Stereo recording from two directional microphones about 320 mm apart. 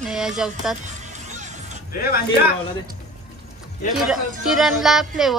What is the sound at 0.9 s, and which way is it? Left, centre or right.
Music, right.